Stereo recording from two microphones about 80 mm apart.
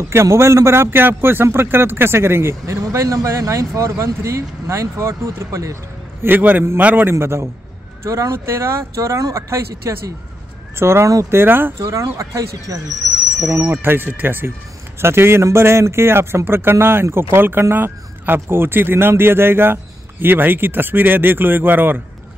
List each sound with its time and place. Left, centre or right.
0.1 s a man's voice: right
6.2 s a man's voice: right
11.8 s a man's voice: right
13.6 s speech: right